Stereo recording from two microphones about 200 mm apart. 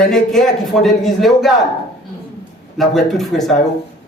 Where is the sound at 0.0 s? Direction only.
Centre (ahead or behind).